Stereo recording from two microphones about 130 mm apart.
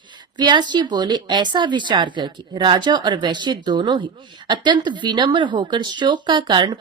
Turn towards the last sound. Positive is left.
turn(degrees=-35)  # may be behind; listen again after turning